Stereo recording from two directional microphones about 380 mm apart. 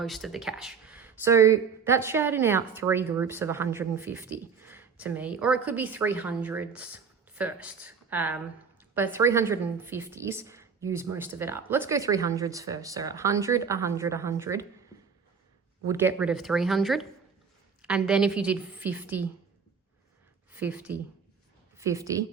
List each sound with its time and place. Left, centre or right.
0.0 s a woman's voice: centre
15.9 s speech: centre
20.5 s a woman's voice: centre